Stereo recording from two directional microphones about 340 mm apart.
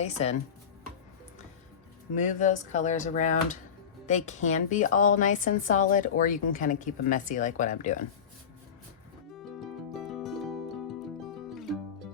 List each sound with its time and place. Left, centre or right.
0.0 s speech: centre
2.1 s speech: left
9.3 s music: centre